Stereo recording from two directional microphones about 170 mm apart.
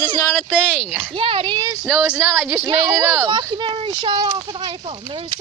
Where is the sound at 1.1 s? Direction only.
30° right (ahead or behind).